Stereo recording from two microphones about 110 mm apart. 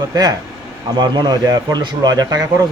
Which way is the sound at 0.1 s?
35° right (ahead or behind).